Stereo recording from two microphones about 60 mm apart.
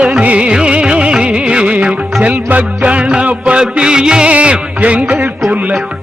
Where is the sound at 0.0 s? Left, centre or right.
Right.